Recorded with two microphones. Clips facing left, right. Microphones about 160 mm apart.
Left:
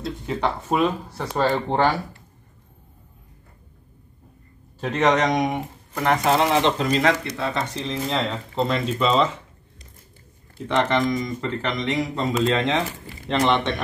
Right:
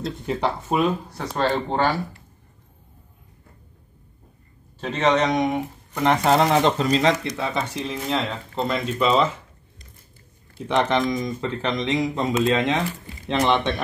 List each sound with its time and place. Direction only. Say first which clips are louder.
0.4 s speech: left 1 dB; centre (ahead or behind)
4.7 s a man's voice: even; 10° left (ahead or behind)
6.0 s speech: right 1 dB; 35° right (ahead or behind)
7.0 s speech: even; 15° right (ahead or behind)
10.7 s speech: even; 15° right (ahead or behind)